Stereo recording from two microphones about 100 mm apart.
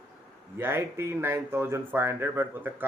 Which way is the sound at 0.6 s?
25° right (ahead or behind).